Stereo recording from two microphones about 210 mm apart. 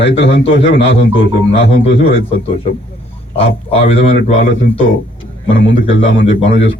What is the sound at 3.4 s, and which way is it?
Speech, 30° left (ahead or behind).